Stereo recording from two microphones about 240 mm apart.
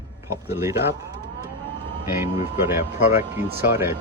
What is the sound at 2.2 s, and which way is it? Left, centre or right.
Speech, centre.